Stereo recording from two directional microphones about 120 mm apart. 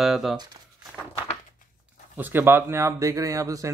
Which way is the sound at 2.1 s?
15° right (ahead or behind).